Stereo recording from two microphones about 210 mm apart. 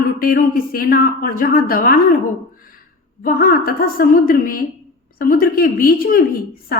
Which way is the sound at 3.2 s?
45° left (ahead or behind).